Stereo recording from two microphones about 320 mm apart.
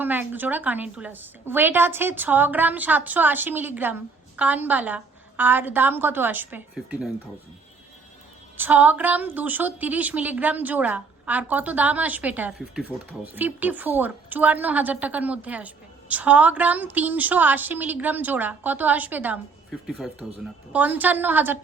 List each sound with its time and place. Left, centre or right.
0.0 s a woman's voice: centre
8.5 s a woman's voice: centre